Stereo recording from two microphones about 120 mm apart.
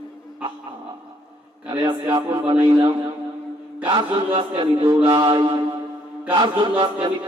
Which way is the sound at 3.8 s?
40° right (ahead or behind).